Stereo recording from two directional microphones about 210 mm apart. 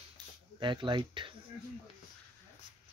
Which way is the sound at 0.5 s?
20° right (ahead or behind).